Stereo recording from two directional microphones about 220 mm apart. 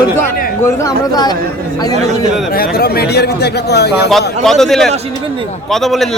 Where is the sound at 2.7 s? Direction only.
45° left (ahead or behind).